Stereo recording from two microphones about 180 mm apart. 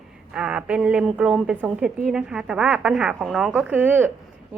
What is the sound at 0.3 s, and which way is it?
A woman's voice, 5° right (ahead or behind).